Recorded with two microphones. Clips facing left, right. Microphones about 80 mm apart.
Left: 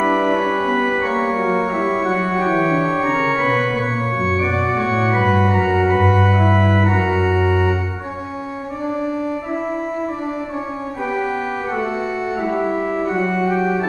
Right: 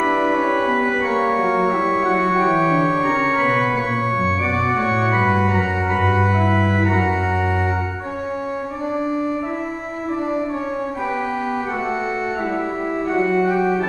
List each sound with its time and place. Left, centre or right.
0.0 s music: centre
0.5 s organ: centre
1.2 s organ: centre
2.1 s organ: centre
5.1 s organ: centre
5.6 s organ: left
5.9 s organ: centre
12.5 s organ: centre
13.4 s organ: centre